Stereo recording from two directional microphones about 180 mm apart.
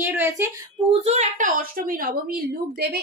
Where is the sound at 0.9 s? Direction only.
40° right (ahead or behind).